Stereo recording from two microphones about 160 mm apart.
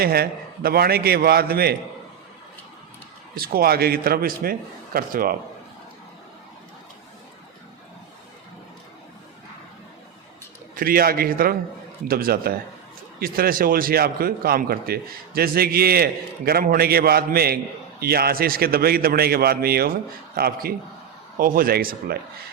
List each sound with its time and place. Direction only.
0.0 s a man's voice: 75° right (ahead or behind)
3.3 s a man's voice: 70° right (ahead or behind)
10.8 s a man's voice: 65° right (ahead or behind)